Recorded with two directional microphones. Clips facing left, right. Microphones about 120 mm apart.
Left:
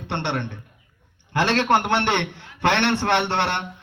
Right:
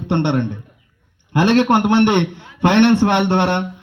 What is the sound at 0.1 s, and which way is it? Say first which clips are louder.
A man's voice: right 9 dB; 20° right (ahead or behind).